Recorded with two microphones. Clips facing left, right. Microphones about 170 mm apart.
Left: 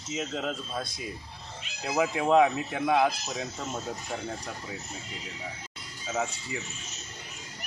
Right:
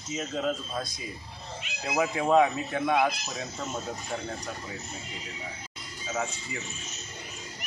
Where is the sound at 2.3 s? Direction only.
5° left (ahead or behind).